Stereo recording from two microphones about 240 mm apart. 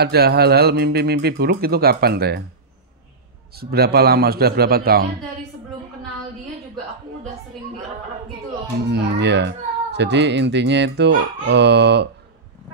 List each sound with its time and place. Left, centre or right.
0.0 s speech: right
3.5 s speech: right
8.9 s a child's voice: right